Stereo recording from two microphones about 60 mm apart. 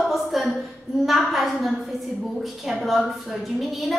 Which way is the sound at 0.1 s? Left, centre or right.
Centre.